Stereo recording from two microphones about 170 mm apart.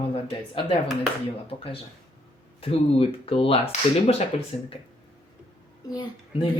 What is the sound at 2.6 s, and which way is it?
Speech, 35° left (ahead or behind).